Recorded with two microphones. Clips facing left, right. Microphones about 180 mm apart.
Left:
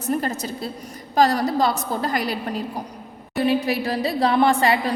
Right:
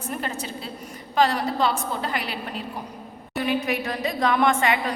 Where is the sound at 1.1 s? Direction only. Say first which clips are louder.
Left 3 dB; 40° left (ahead or behind).